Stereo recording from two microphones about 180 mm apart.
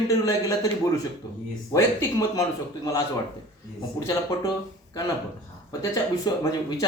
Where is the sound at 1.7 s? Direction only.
15° left (ahead or behind).